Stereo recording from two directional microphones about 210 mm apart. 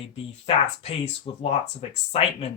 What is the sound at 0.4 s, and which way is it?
Speech, 25° left (ahead or behind).